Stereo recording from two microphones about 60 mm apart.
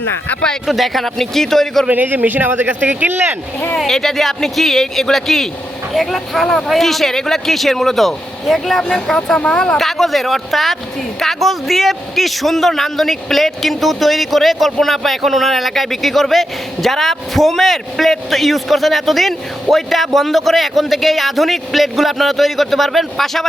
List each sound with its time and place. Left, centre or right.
0.7 s a man's voice: centre
1.9 s speech: right
3.8 s a man's voice: centre